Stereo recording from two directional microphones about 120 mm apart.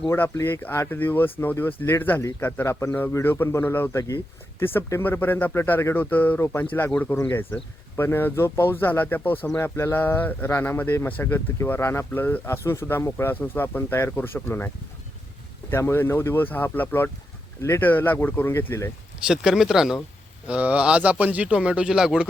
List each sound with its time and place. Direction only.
0.1 s speech: 20° left (ahead or behind)
15.7 s speech: 20° left (ahead or behind)
19.2 s speech: 5° right (ahead or behind)